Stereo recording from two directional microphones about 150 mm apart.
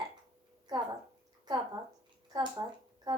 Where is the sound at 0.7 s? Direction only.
25° right (ahead or behind).